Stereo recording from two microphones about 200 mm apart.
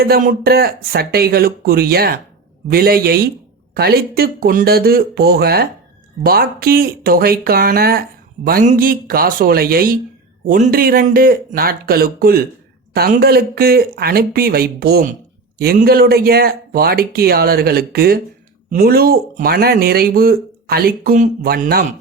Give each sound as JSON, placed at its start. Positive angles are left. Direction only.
{"t": 0.0, "sound": "speech", "side_deg": -45}